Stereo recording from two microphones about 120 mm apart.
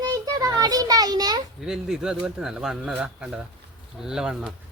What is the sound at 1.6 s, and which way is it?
Speech, 5° right (ahead or behind).